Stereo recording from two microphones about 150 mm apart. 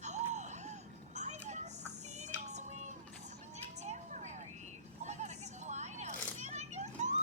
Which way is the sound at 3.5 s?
50° right (ahead or behind).